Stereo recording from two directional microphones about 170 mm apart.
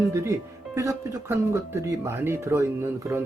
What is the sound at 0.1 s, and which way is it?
Speech, 15° right (ahead or behind).